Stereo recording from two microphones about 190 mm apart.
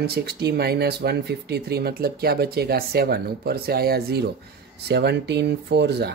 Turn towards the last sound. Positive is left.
turn(degrees=-60)  # may be behind; listen again after turning